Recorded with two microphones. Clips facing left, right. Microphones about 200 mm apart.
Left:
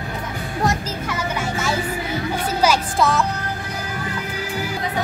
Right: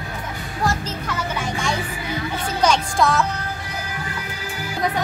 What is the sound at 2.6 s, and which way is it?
Music, 5° left (ahead or behind).